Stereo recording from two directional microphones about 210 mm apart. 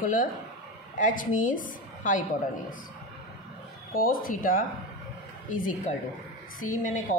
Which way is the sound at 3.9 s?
45° left (ahead or behind).